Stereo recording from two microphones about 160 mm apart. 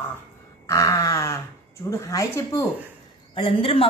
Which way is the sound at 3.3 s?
35° left (ahead or behind).